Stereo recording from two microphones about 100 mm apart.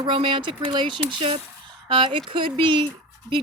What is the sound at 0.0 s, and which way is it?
Speech, 55° right (ahead or behind).